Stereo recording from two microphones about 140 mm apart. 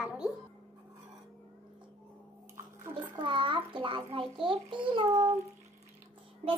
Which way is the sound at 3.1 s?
35° right (ahead or behind).